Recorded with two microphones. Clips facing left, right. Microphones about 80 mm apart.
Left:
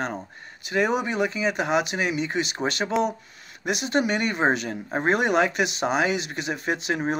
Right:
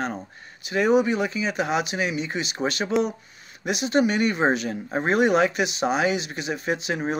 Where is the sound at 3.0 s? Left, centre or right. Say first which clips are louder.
Left 2 dB; left.